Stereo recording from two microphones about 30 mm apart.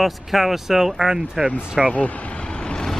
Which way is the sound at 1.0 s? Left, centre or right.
Right.